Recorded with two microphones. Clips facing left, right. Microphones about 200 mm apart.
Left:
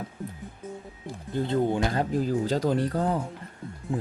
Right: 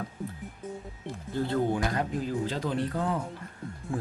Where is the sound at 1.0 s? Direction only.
20° left (ahead or behind); by 3.2 s 40° left (ahead or behind).